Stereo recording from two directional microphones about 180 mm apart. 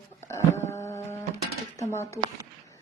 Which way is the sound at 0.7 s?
15° left (ahead or behind).